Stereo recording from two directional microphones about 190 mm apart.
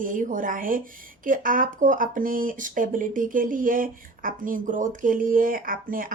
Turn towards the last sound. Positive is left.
turn(degrees=-45)  # may be behind; listen again after turning